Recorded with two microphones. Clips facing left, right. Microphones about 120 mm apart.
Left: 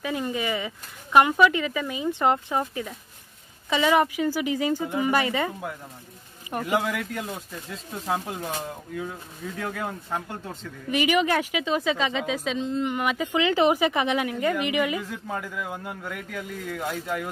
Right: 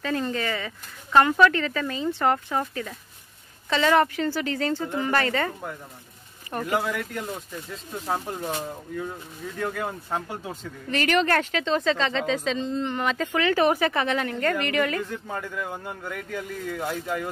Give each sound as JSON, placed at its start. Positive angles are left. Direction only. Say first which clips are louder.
{"t": 0.0, "sound": "speech", "louder": "right 1 dB", "side_deg": 15}
{"t": 6.8, "sound": "speech", "louder": "even", "side_deg": 0}
{"t": 9.6, "sound": "speech", "louder": "right 3 dB", "side_deg": 0}
{"t": 10.9, "sound": "speech", "louder": "even", "side_deg": 10}